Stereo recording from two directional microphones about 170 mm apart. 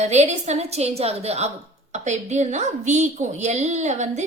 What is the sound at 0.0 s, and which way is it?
A woman's voice, 40° right (ahead or behind).